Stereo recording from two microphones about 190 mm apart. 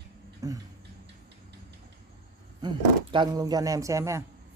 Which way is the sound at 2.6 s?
25° right (ahead or behind).